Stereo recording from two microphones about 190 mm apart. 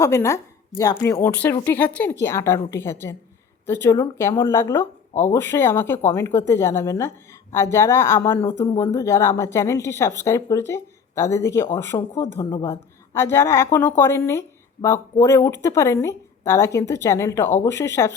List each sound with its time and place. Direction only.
0.0 s a woman's voice: 15° left (ahead or behind)